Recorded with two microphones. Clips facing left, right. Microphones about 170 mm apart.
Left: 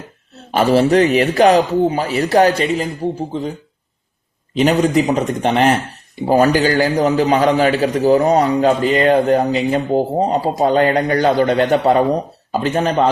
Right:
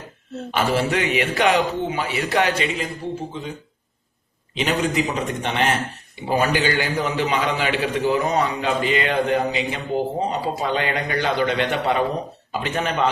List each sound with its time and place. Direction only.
0.5 s a man's voice: 35° left (ahead or behind)
4.5 s a man's voice: 40° left (ahead or behind)